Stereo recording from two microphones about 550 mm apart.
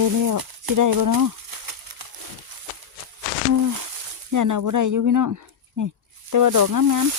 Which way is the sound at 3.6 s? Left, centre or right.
Right.